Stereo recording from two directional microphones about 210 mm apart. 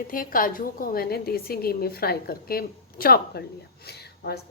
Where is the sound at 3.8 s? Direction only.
50° left (ahead or behind).